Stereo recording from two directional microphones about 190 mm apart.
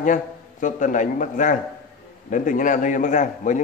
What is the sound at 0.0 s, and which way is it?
A man's voice, 45° left (ahead or behind).